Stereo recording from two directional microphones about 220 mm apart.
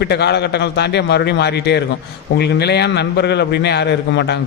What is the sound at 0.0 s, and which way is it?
A man's voice, 50° left (ahead or behind).